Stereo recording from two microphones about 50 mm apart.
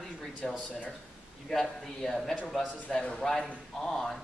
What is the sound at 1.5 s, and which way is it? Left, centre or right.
A man's voice, centre.